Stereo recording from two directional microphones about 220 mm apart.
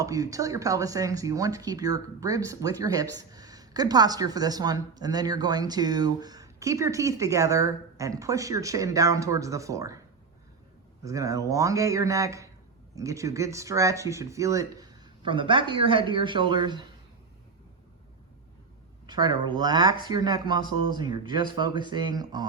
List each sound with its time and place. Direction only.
0.0 s speech: 15° right (ahead or behind)
11.0 s speech: 15° right (ahead or behind)
19.0 s speech: 20° right (ahead or behind)